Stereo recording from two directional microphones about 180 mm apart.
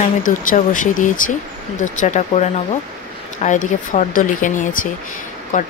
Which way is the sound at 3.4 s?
45° left (ahead or behind).